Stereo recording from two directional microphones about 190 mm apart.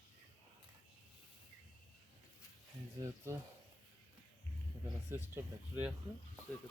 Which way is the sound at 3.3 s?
15° right (ahead or behind).